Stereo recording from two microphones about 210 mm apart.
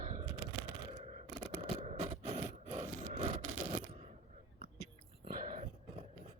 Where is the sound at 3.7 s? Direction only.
30° right (ahead or behind).